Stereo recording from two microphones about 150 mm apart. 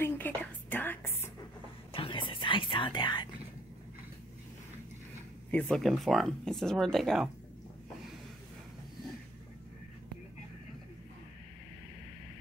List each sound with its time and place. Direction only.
0.0 s whispering: 10° left (ahead or behind)
1.9 s whispering: 35° left (ahead or behind)
5.5 s speech: 5° left (ahead or behind)